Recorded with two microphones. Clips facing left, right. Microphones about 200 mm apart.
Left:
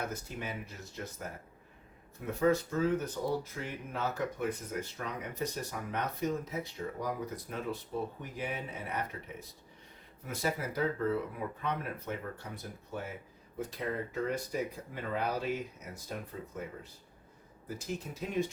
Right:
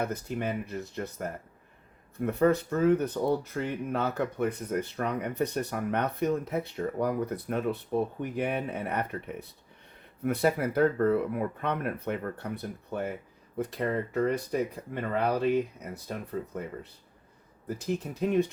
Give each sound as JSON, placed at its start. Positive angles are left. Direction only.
{"t": 0.0, "sound": "speech", "side_deg": -60}
{"t": 18.2, "sound": "speech", "side_deg": -60}